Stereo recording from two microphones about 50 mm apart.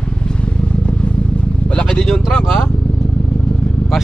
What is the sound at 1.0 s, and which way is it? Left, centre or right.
Vehicle, left.